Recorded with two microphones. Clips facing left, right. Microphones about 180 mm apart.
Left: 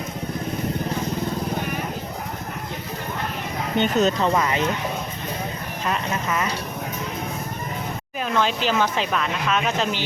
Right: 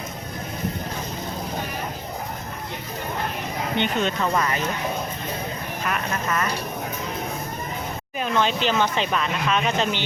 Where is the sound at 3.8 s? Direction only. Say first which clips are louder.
Left 5 dB; 40° left (ahead or behind).